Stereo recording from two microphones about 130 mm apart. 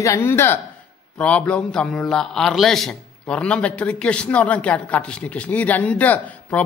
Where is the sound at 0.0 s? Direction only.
20° left (ahead or behind).